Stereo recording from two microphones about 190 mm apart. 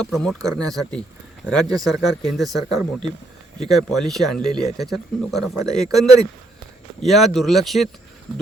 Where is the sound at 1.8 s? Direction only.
Centre (ahead or behind).